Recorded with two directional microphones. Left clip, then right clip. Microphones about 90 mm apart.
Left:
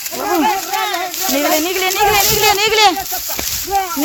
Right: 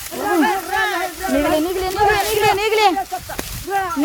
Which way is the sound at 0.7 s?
35° right (ahead or behind).